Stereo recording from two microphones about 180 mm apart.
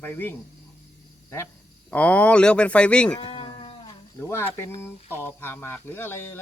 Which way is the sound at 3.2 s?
30° left (ahead or behind).